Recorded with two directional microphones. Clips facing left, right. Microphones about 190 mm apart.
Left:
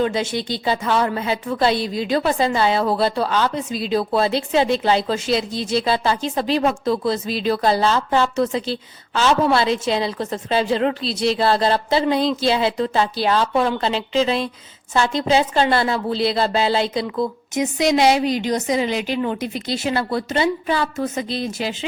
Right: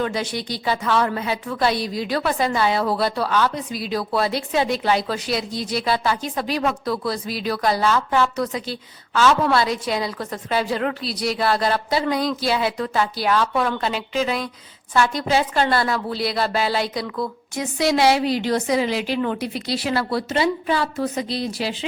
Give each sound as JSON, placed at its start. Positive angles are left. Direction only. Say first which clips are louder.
{"t": 0.0, "sound": "a woman's voice", "louder": "left 4 dB", "side_deg": 25}